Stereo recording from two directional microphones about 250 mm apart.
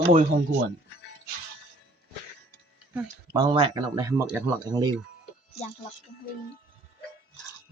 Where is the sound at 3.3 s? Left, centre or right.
Centre.